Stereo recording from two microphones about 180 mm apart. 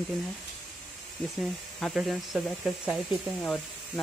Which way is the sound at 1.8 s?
Centre (ahead or behind).